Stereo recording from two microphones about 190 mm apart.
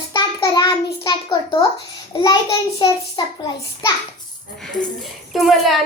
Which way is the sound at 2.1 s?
20° left (ahead or behind).